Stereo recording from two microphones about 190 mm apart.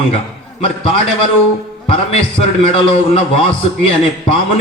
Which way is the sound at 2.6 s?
30° left (ahead or behind).